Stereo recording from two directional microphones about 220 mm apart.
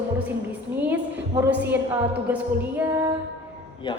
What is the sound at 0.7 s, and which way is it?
Music, 10° right (ahead or behind).